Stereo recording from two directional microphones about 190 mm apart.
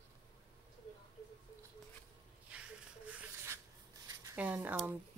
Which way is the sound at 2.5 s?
5° right (ahead or behind).